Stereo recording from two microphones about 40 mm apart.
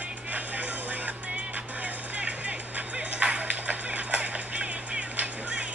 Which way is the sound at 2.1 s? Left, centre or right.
Right.